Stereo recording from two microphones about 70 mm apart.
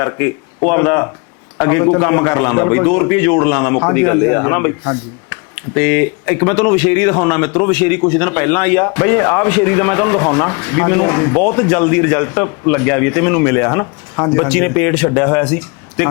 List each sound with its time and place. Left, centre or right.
0.0 s a man's voice: left